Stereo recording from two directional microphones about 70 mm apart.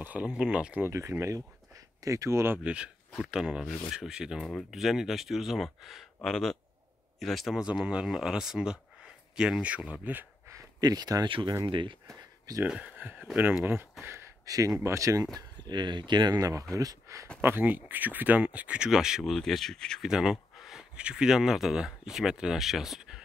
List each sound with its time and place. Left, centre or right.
0.0 s speech: right
0.8 s speech: right
2.6 s speech: centre
7.8 s speech: centre
10.8 s speech: right
12.6 s speech: centre
14.4 s speech: right
14.8 s speech: right
15.7 s speech: right
16.3 s speech: right
17.4 s speech: right
18.9 s speech: centre
19.3 s speech: centre
20.0 s speech: centre